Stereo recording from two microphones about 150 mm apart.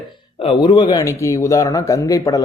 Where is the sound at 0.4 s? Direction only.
30° left (ahead or behind).